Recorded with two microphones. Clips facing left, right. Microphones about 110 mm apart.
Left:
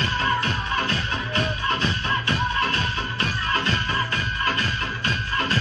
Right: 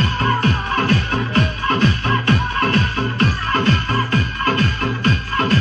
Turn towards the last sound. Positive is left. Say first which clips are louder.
# right 7 dB
turn(degrees=-55)  # may be behind; listen again after turning